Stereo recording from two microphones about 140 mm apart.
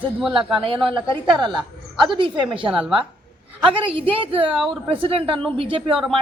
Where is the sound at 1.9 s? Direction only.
35° right (ahead or behind).